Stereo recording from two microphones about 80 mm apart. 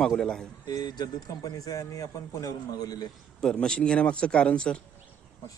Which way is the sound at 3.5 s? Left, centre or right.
Centre.